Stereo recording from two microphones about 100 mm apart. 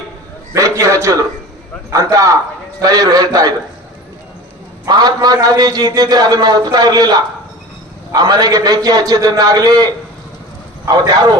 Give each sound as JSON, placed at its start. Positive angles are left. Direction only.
{"t": 0.5, "sound": "a man's voice", "side_deg": -35}
{"t": 4.9, "sound": "a man's voice", "side_deg": -45}